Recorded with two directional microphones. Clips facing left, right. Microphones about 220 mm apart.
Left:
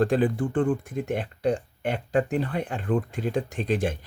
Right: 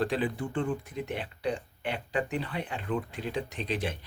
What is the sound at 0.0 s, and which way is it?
Speech, 45° left (ahead or behind).